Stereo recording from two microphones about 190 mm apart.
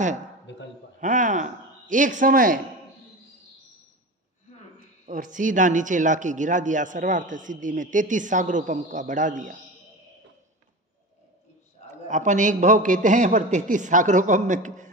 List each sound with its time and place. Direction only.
0.5 s a man's voice: 75° left (ahead or behind)
1.0 s a man's voice: 45° right (ahead or behind)
5.0 s a man's voice: 45° right (ahead or behind)
11.9 s a man's voice: 40° right (ahead or behind)